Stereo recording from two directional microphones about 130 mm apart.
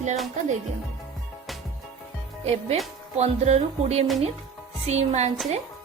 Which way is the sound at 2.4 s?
55° right (ahead or behind).